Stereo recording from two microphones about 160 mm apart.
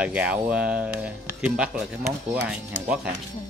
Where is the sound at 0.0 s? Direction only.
10° right (ahead or behind).